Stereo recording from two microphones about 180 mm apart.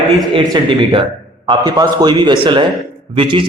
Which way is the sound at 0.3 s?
25° right (ahead or behind).